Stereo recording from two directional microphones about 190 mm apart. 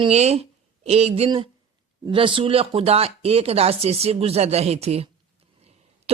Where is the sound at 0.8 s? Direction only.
35° right (ahead or behind).